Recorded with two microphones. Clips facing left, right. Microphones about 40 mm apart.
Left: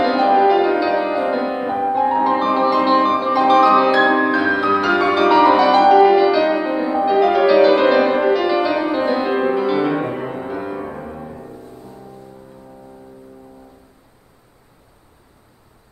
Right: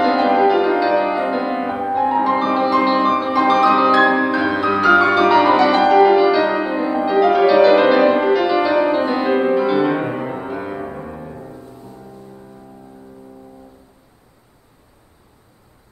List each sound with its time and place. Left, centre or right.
0.0 s music: centre